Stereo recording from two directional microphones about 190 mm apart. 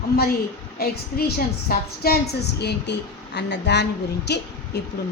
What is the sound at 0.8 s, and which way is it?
Female singing, 55° left (ahead or behind).